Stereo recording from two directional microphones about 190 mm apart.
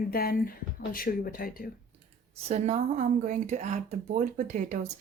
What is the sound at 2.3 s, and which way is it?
Speech, 35° right (ahead or behind).